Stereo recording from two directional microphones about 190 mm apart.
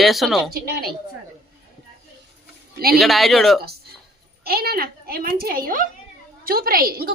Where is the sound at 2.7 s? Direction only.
55° right (ahead or behind).